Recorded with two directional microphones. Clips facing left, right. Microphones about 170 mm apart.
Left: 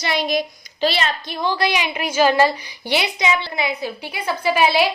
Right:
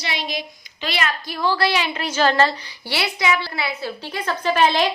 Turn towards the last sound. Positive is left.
turn(degrees=10)  # may be behind; listen again after turning